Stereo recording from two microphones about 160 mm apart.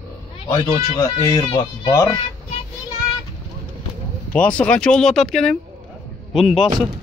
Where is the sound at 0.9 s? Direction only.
25° left (ahead or behind).